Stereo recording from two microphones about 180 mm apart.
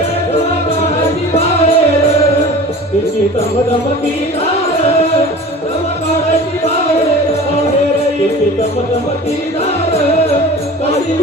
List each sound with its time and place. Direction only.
1.3 s music: 35° left (ahead or behind)